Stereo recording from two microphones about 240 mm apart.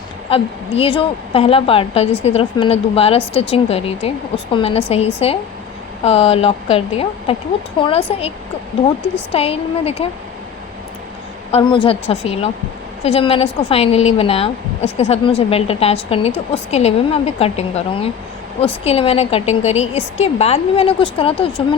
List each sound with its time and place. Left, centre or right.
0.3 s a woman's voice: left
9.3 s a woman's voice: left
11.5 s a woman's voice: left